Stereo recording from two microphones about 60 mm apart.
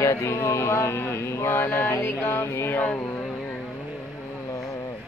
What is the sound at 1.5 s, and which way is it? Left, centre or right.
Mantra, left.